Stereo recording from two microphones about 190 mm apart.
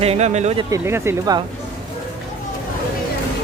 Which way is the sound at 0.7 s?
15° right (ahead or behind).